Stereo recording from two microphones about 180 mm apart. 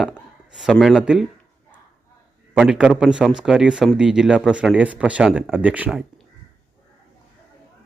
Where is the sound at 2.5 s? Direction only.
5° right (ahead or behind).